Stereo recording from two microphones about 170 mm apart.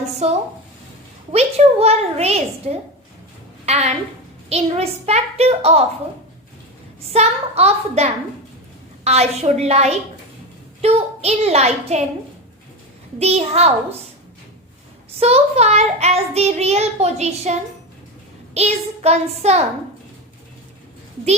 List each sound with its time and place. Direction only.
0.0 s a sound: 40° right (ahead or behind)
1.3 s child singing: 35° right (ahead or behind)
7.1 s child singing: 40° right (ahead or behind)
13.1 s child singing: 40° right (ahead or behind)
15.2 s child singing: 40° right (ahead or behind)